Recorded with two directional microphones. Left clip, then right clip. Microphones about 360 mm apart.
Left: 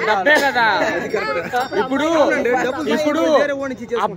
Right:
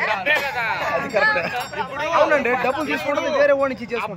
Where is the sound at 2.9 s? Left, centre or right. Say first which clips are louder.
Left 5 dB; left.